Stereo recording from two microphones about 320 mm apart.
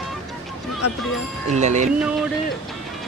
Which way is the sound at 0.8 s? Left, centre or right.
Left.